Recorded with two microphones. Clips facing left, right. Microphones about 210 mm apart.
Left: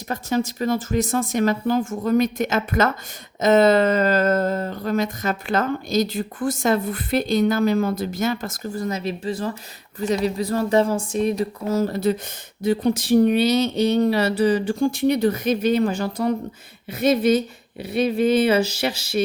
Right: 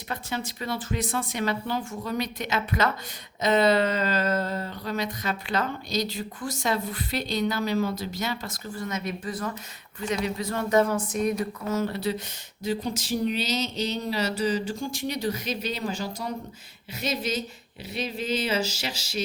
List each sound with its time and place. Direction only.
0.1 s speech: 45° left (ahead or behind)
12.6 s speech: 60° left (ahead or behind)